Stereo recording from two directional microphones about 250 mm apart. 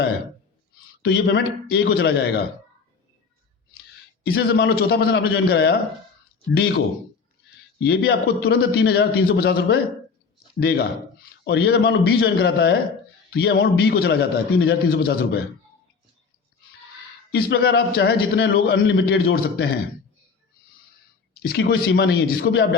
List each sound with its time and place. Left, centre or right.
1.0 s a man's voice: left
4.3 s a man's voice: left
7.8 s a man's voice: left
17.3 s a man's voice: left
21.4 s speech: left